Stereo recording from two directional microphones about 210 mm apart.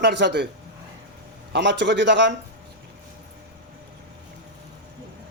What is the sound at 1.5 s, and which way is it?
Speech, 60° right (ahead or behind).